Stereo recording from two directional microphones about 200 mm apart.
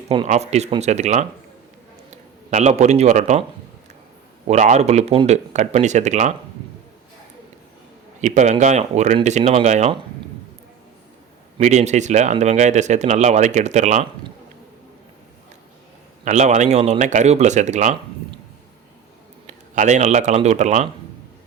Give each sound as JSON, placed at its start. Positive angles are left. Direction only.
{"t": 0.3, "sound": "speech", "side_deg": -35}
{"t": 4.4, "sound": "speech", "side_deg": -35}
{"t": 8.2, "sound": "speech", "side_deg": -35}
{"t": 11.6, "sound": "speech", "side_deg": -35}
{"t": 16.2, "sound": "speech", "side_deg": -35}
{"t": 19.5, "sound": "speech", "side_deg": -35}